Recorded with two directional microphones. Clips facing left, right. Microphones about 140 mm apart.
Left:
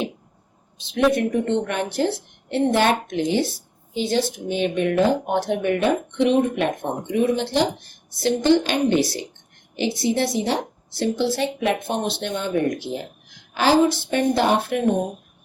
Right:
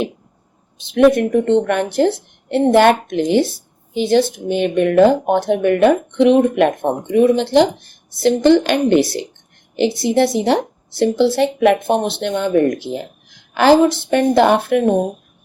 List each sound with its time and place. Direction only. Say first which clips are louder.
0.9 s speech: right 7 dB; 60° right (ahead or behind)
8.2 s speech: right 6 dB; 60° right (ahead or behind)